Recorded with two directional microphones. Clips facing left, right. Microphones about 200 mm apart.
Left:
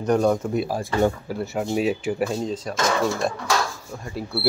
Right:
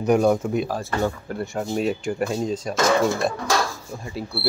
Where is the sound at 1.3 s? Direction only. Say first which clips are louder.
Left 1 dB; 5° left (ahead or behind).